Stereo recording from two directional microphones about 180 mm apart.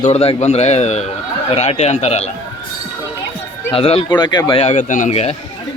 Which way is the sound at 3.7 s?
30° left (ahead or behind).